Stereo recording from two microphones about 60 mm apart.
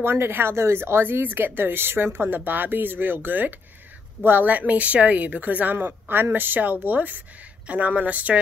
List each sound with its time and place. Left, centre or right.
0.0 s a woman's voice: right